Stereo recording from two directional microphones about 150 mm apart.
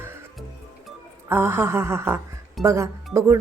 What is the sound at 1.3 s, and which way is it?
Speech, 15° right (ahead or behind).